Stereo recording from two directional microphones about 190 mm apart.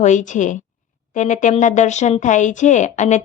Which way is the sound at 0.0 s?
40° left (ahead or behind).